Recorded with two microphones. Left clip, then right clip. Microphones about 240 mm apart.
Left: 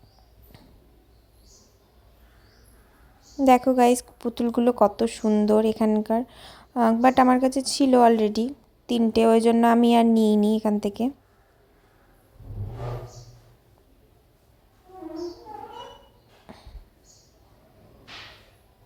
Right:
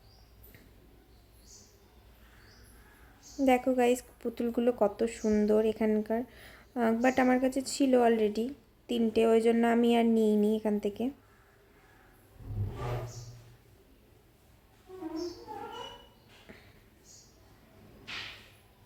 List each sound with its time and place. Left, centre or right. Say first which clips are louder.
3.4 s a woman's voice: left 8 dB; left